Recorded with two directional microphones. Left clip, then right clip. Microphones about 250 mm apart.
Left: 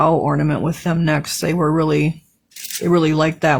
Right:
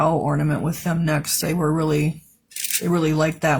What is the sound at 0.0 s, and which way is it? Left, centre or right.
Speech, left.